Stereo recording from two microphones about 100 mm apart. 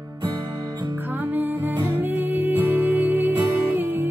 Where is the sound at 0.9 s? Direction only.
20° right (ahead or behind).